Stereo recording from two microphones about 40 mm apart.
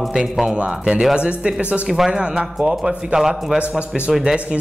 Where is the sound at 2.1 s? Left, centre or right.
Right.